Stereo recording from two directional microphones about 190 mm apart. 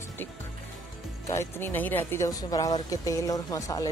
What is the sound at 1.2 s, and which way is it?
Speech, 15° left (ahead or behind).